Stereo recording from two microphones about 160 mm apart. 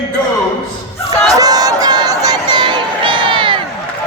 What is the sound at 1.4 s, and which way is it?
Crowd, 25° right (ahead or behind).